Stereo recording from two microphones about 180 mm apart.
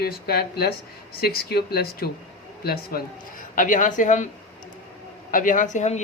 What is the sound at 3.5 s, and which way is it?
Speech, 45° left (ahead or behind).